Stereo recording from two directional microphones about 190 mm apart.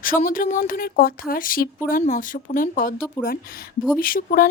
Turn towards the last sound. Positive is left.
turn(degrees=50)  # may be behind; listen again after turning